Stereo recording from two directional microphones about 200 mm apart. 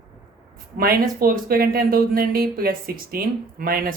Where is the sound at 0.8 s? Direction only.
50° right (ahead or behind).